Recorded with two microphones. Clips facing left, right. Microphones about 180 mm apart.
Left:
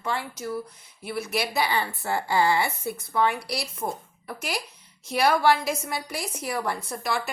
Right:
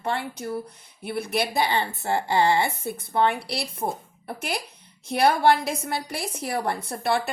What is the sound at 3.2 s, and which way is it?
A woman's voice, 60° right (ahead or behind).